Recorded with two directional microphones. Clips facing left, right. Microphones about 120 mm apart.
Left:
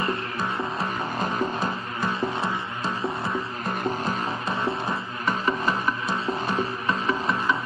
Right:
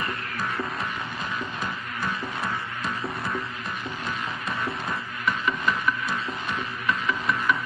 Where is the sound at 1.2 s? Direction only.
40° left (ahead or behind).